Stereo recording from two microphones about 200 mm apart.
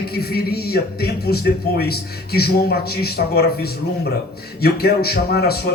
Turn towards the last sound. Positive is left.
turn(degrees=55)  # may be behind; listen again after turning